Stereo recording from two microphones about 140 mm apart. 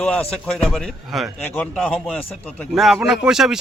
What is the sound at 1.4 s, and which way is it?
A man's voice, 10° left (ahead or behind).